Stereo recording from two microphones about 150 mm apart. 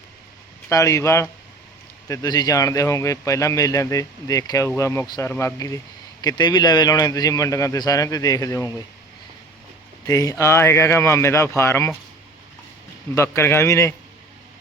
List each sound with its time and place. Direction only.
0.7 s speech: 20° left (ahead or behind)
10.1 s speech: 25° left (ahead or behind)
13.1 s a man's voice: 15° left (ahead or behind)